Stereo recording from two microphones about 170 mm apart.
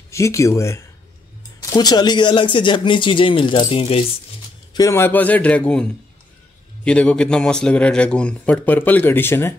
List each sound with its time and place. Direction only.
0.1 s a man's voice: 15° left (ahead or behind); by 4.0 s 35° left (ahead or behind)
4.7 s a man's voice: 15° left (ahead or behind)